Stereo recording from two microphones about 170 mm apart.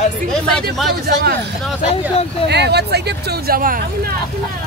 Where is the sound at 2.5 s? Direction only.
75° right (ahead or behind); by 3.8 s 60° right (ahead or behind).